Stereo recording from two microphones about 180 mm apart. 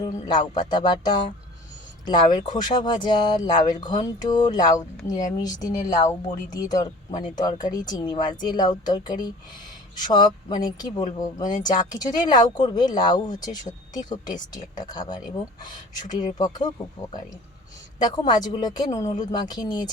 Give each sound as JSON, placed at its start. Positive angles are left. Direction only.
{"t": 0.0, "sound": "speech", "side_deg": 20}